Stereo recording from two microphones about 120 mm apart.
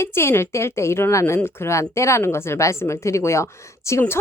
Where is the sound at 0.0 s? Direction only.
20° left (ahead or behind).